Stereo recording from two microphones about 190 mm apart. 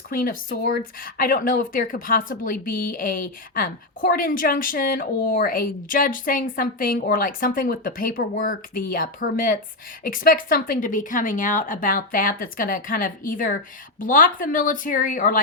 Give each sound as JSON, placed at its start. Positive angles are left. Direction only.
{"t": 0.1, "sound": "speech", "side_deg": 50}